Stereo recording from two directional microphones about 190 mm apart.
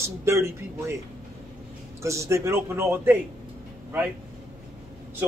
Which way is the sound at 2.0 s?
15° right (ahead or behind).